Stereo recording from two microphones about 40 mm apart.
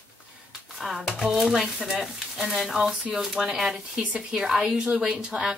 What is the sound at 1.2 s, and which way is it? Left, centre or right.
Speech, centre.